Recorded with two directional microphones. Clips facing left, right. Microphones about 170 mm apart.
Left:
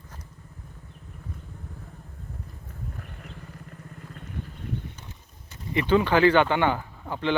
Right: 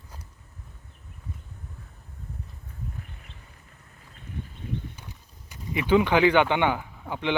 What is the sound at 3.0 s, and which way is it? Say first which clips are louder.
Vehicle: left 4 dB; 55° left (ahead or behind).